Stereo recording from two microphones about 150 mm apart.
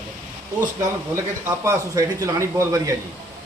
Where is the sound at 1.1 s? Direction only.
20° right (ahead or behind).